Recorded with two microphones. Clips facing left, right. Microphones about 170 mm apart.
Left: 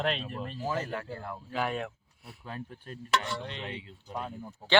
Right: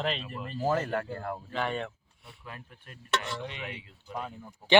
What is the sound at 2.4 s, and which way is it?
Speech, 30° left (ahead or behind).